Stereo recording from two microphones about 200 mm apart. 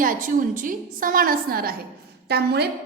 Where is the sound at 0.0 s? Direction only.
40° right (ahead or behind).